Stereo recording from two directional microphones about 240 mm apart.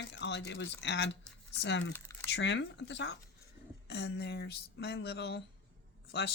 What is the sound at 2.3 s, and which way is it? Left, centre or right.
Speech, left.